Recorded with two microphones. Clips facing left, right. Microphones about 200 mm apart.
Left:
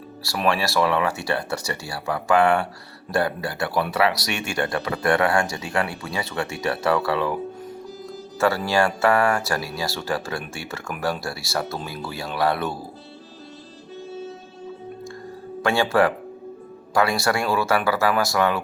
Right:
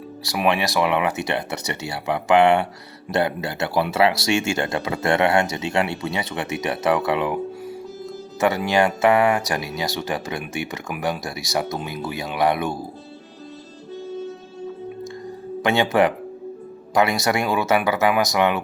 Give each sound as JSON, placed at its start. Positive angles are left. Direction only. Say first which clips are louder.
{"t": 0.2, "sound": "speech", "louder": "right 2 dB", "side_deg": -20}
{"t": 8.4, "sound": "speech", "louder": "right 1 dB", "side_deg": -20}
{"t": 15.6, "sound": "speech", "louder": "right 1 dB", "side_deg": -20}